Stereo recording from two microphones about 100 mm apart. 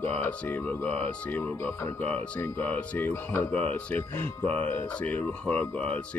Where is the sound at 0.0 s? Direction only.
15° left (ahead or behind).